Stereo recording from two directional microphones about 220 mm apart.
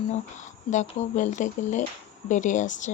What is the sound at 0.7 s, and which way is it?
Speech, 35° left (ahead or behind).